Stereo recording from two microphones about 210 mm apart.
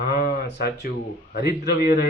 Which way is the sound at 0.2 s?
50° left (ahead or behind).